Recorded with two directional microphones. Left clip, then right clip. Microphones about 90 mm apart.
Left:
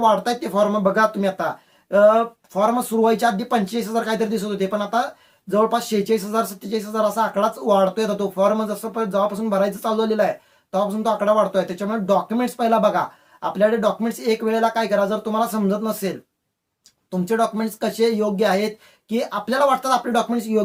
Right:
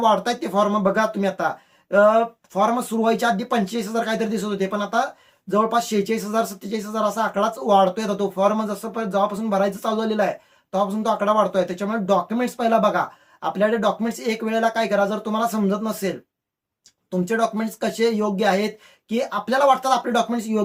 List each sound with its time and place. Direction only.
0.0 s speech: 25° right (ahead or behind)